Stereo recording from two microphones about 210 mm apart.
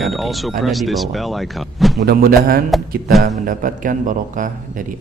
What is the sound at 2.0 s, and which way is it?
A man's voice, 45° right (ahead or behind).